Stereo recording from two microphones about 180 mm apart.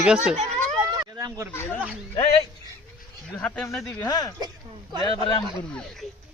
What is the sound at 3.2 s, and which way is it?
Speech, 5° left (ahead or behind).